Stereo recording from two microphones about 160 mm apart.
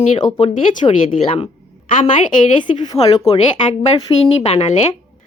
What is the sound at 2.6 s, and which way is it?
Speech, 35° left (ahead or behind).